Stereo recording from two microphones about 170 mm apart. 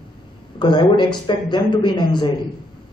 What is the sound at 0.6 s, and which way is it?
A man's voice, 25° left (ahead or behind).